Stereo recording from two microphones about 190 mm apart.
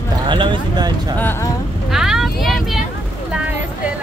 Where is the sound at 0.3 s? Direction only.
25° right (ahead or behind).